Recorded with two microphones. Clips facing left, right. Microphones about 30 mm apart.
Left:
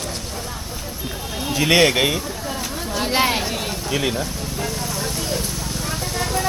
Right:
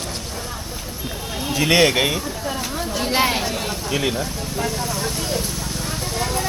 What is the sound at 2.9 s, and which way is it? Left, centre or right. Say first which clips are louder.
Vehicle: left 1 dB; centre.